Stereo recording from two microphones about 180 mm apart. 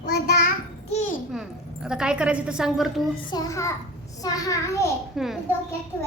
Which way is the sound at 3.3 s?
20° left (ahead or behind).